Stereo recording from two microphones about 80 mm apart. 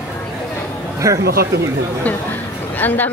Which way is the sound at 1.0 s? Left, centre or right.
Right.